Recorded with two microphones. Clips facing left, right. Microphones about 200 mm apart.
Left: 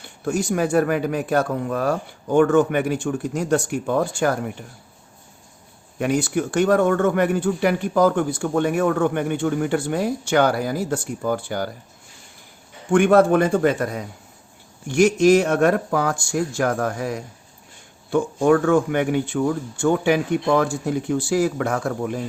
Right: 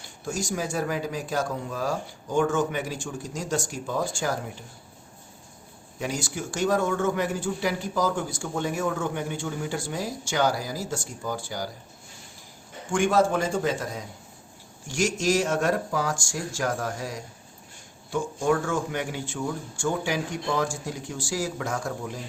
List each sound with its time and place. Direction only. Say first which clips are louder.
0.0 s speech: left 8 dB; 60° left (ahead or behind)
6.0 s speech: left 10 dB; 60° left (ahead or behind)
12.9 s speech: left 8 dB; 60° left (ahead or behind)